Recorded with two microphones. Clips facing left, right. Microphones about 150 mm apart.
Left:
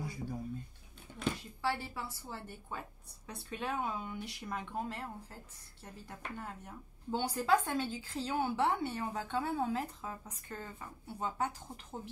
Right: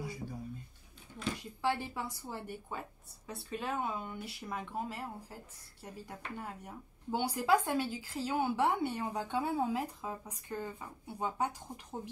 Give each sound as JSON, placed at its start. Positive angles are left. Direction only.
{"t": 1.6, "sound": "speech", "side_deg": -15}
{"t": 3.3, "sound": "speech", "side_deg": 0}